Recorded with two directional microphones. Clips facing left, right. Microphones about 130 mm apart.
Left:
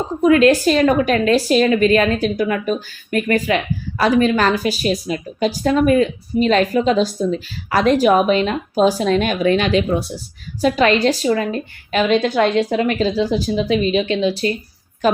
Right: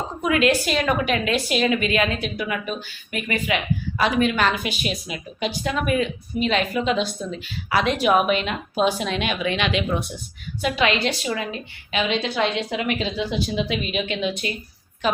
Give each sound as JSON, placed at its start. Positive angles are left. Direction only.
{"t": 0.2, "sound": "a woman's voice", "side_deg": 35}
{"t": 15.0, "sound": "a woman's voice", "side_deg": 45}